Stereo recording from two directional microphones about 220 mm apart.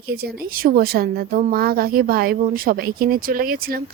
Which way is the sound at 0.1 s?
45° right (ahead or behind).